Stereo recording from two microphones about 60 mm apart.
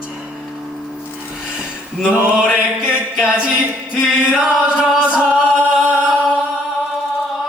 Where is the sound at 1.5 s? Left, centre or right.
Centre.